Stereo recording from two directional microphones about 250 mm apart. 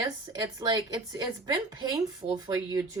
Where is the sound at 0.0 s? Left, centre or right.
Centre.